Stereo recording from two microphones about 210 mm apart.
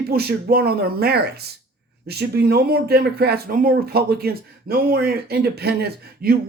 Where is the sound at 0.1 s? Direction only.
45° right (ahead or behind).